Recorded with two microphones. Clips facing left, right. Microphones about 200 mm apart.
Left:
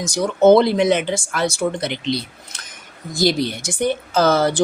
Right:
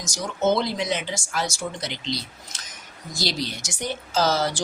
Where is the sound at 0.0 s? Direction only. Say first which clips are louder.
Left 10 dB; 60° left (ahead or behind).